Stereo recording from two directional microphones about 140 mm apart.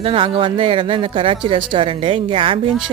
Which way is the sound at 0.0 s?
40° right (ahead or behind).